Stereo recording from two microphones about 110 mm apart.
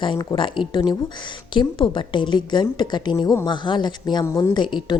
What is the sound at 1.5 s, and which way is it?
A woman's voice, 45° left (ahead or behind).